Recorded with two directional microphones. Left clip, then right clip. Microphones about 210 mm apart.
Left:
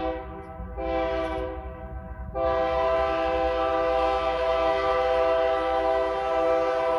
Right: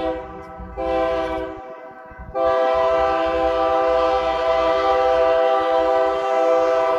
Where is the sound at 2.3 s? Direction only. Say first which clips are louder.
Right 7 dB; 10° right (ahead or behind).